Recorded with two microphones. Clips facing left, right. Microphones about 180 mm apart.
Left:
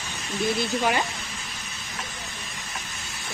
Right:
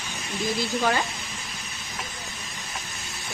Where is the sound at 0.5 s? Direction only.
20° left (ahead or behind).